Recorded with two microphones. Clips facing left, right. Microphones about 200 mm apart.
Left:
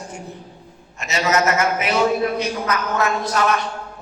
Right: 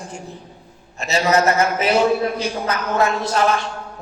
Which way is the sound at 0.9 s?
35° right (ahead or behind).